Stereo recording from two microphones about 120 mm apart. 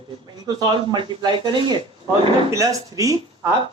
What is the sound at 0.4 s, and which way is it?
Speech, 35° right (ahead or behind).